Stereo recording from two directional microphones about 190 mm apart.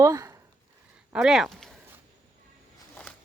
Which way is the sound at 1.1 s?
Centre (ahead or behind).